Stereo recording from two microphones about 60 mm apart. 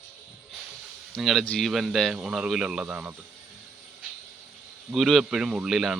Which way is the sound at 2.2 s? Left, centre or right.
Centre.